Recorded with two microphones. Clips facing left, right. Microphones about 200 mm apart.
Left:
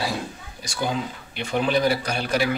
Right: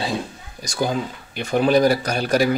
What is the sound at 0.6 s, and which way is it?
Speech, 40° right (ahead or behind).